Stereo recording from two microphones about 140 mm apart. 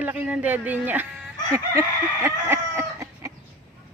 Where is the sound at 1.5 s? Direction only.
20° right (ahead or behind).